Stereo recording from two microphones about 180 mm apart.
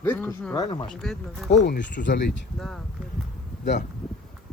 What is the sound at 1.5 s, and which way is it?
Speech, 75° left (ahead or behind).